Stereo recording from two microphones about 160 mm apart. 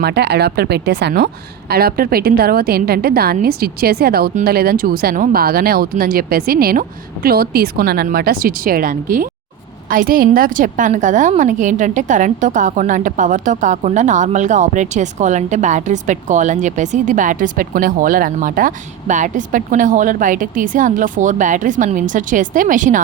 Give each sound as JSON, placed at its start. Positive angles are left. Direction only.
{"t": 0.0, "sound": "a woman's voice", "side_deg": -90}